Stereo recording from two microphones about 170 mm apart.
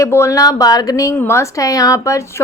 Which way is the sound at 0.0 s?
15° left (ahead or behind).